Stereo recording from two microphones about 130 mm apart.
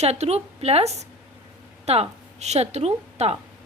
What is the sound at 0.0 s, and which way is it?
A woman's voice, 55° right (ahead or behind).